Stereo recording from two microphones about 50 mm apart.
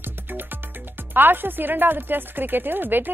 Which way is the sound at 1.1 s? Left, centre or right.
Right.